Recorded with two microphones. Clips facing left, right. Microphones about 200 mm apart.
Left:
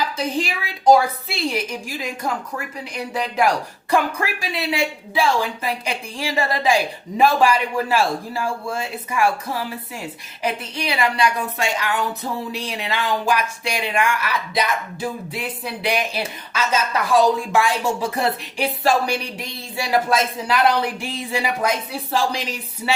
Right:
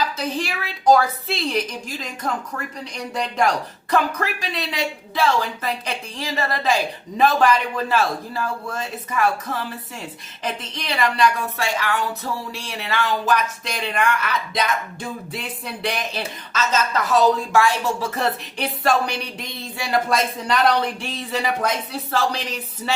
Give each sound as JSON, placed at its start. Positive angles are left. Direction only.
{"t": 0.2, "sound": "speech", "side_deg": 15}